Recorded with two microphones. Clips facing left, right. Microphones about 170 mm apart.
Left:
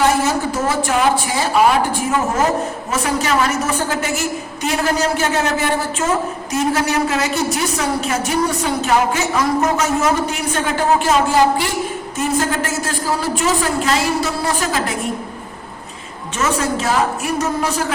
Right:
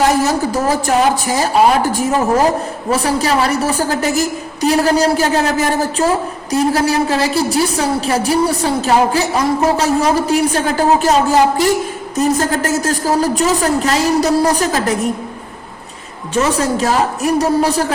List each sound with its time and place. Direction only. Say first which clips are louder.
0.2 s a sound: right 3 dB; 40° right (ahead or behind)
1.9 s a woman's voice: right 4 dB; 35° right (ahead or behind)
16.3 s a woman's voice: right 4 dB; 35° right (ahead or behind)